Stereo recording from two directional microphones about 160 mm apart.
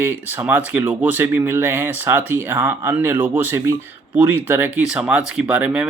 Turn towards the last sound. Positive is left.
turn(degrees=-10)  # may be behind; listen again after turning